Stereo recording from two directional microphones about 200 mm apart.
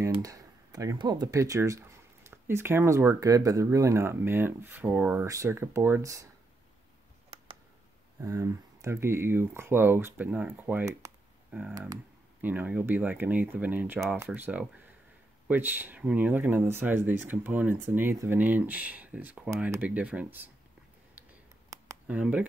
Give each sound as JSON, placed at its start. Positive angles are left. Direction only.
{"t": 0.0, "sound": "speech", "side_deg": -15}
{"t": 8.2, "sound": "speech", "side_deg": -15}
{"t": 21.6, "sound": "a sound", "side_deg": -10}